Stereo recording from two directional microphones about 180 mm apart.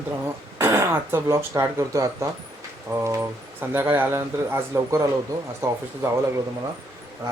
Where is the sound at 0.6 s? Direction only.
15° right (ahead or behind).